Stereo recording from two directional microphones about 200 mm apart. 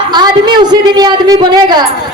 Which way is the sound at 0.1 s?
20° right (ahead or behind).